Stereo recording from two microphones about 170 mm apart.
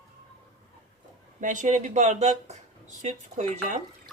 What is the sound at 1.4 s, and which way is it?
Speech, 50° right (ahead or behind).